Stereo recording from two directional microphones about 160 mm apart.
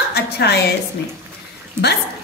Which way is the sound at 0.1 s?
90° left.